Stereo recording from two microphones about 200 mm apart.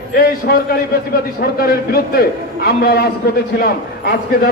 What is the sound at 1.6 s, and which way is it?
A man's voice, 50° left (ahead or behind).